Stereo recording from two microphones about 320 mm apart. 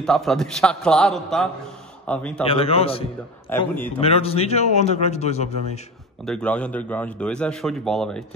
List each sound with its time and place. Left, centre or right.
0.0 s a man's voice: centre
2.4 s a man's voice: centre
3.4 s a man's voice: centre
4.0 s a man's voice: centre
6.2 s a man's voice: centre